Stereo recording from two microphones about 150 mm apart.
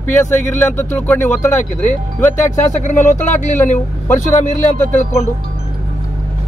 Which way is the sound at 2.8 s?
60° left (ahead or behind).